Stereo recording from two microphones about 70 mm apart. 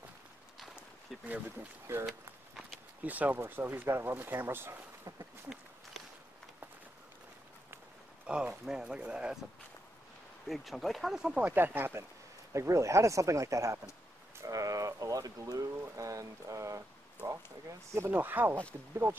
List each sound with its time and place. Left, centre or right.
1.2 s speech: right
1.9 s speech: right
8.3 s speech: centre
10.4 s speech: centre
11.5 s speech: right
12.5 s speech: right
18.1 s speech: right